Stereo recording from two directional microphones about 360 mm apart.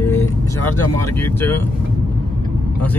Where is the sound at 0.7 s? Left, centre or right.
Left.